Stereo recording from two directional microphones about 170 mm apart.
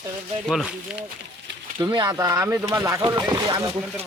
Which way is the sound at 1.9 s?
20° right (ahead or behind).